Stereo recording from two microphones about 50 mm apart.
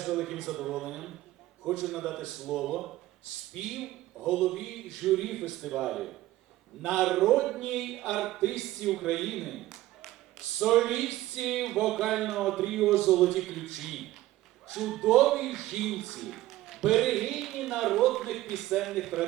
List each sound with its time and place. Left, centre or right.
0.0 s a man's voice: centre